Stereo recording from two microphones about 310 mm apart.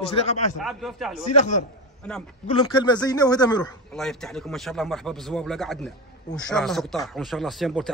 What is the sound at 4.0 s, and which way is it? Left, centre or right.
Speech, centre.